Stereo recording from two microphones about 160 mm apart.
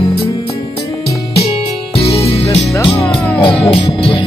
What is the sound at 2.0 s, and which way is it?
Music, 40° left (ahead or behind).